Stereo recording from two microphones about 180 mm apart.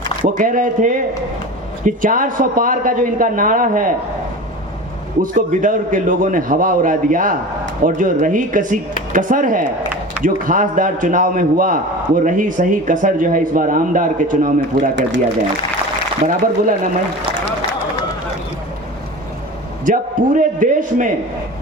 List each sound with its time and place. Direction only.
0.3 s a man's voice: 45° right (ahead or behind)
5.2 s a man's voice: 45° right (ahead or behind)
16.2 s a man's voice: 45° right (ahead or behind)
19.8 s a man's voice: 45° right (ahead or behind)